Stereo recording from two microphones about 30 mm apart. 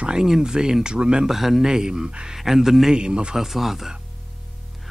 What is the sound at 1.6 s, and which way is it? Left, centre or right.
Speech, right.